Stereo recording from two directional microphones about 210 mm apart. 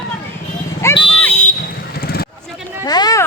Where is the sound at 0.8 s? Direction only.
10° left (ahead or behind).